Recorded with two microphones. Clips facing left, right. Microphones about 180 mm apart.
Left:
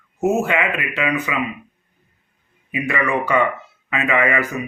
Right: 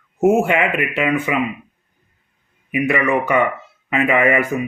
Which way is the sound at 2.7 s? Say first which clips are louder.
Right 4 dB; 20° right (ahead or behind).